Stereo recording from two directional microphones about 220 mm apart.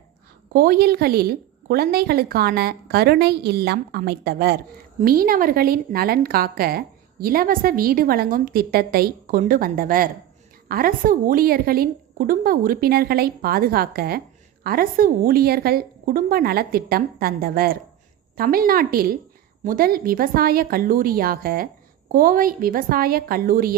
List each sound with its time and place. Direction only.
0.5 s a woman's voice: 40° right (ahead or behind)